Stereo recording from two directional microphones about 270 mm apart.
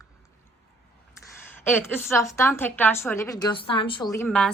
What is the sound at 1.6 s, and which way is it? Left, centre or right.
A woman's voice, centre.